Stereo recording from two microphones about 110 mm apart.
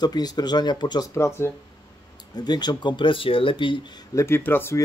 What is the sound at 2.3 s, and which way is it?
Speech, 40° left (ahead or behind).